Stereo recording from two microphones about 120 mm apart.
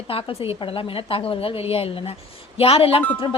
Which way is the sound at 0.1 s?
50° left (ahead or behind).